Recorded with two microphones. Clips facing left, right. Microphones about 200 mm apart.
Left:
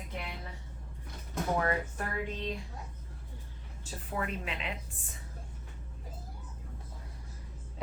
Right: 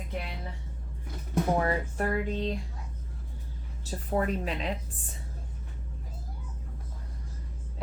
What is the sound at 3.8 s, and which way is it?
Speech, 40° right (ahead or behind).